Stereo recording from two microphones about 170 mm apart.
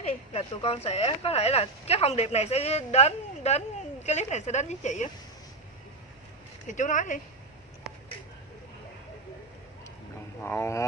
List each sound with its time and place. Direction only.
0.1 s speech: 35° left (ahead or behind)
6.7 s speech: 50° left (ahead or behind)
10.4 s didgeridoo: 15° left (ahead or behind)